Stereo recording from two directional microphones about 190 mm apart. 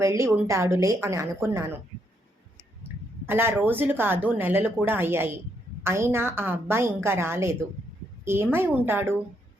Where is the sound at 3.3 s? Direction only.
10° right (ahead or behind).